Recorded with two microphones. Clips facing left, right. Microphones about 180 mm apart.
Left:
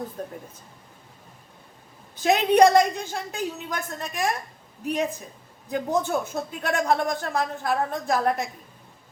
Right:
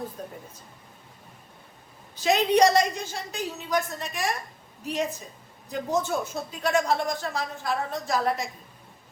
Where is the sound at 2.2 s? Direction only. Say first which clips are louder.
Left 3 dB; 55° left (ahead or behind).